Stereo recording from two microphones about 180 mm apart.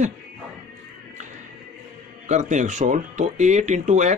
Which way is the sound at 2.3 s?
40° right (ahead or behind).